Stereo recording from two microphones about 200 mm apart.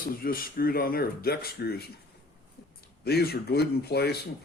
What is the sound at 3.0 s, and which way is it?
Speech, 55° left (ahead or behind).